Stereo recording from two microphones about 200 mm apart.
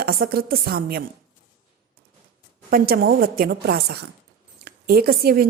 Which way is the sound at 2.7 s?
50° right (ahead or behind).